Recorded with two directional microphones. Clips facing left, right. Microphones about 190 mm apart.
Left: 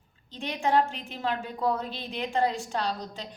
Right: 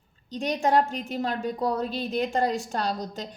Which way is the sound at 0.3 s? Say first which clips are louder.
Right 3 dB; 40° right (ahead or behind).